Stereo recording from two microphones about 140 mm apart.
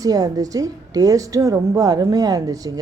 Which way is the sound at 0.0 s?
25° right (ahead or behind).